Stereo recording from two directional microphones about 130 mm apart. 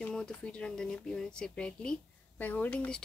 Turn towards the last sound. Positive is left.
turn(degrees=10)  # may be behind; listen again after turning